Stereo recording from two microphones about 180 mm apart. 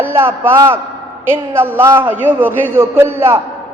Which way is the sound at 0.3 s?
15° right (ahead or behind).